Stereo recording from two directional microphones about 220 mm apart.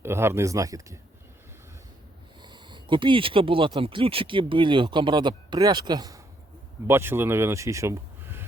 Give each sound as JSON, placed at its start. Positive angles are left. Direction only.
{"t": 0.0, "sound": "speech", "side_deg": -10}
{"t": 2.4, "sound": "a man's voice", "side_deg": -20}